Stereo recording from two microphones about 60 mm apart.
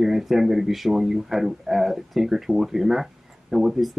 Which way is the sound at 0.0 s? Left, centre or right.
Centre.